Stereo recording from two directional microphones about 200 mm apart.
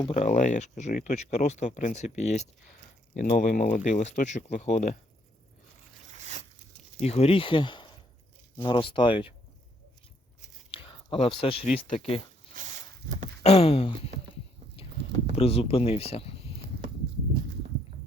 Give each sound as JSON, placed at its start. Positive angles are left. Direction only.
{"t": 0.0, "sound": "speech", "side_deg": 30}
{"t": 6.1, "sound": "zipper", "side_deg": -35}
{"t": 7.0, "sound": "speech", "side_deg": 30}
{"t": 10.7, "sound": "a sound", "side_deg": 25}
{"t": 11.9, "sound": "speech", "side_deg": 30}
{"t": 13.4, "sound": "speech", "side_deg": 30}
{"t": 15.4, "sound": "speech", "side_deg": 30}